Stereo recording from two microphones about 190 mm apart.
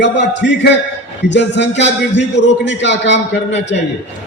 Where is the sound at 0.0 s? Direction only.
65° left (ahead or behind).